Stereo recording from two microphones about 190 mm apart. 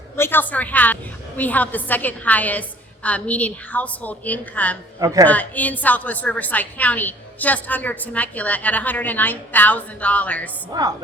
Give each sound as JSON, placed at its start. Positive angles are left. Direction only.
{"t": 0.2, "sound": "a woman's voice", "side_deg": 10}
{"t": 4.9, "sound": "a man's voice", "side_deg": -20}
{"t": 5.2, "sound": "a woman's voice", "side_deg": 10}
{"t": 10.7, "sound": "a woman's voice", "side_deg": -20}